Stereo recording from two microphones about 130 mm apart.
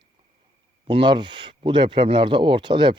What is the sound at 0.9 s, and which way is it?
Speech, 40° right (ahead or behind).